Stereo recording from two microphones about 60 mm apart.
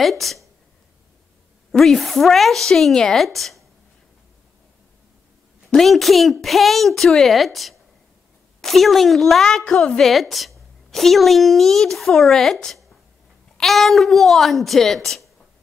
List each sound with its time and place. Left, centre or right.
0.0 s a woman's voice: centre
1.7 s a woman's voice: centre
5.7 s a woman's voice: centre
9.7 s a woman's voice: centre
10.0 s a woman's voice: centre